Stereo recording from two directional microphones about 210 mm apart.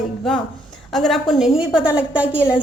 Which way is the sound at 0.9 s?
Centre (ahead or behind).